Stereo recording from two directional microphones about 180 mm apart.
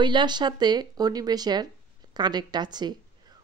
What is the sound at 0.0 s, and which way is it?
Speech, 25° right (ahead or behind).